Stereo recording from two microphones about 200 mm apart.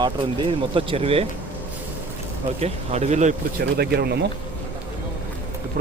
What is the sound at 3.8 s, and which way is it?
Speech, 55° right (ahead or behind).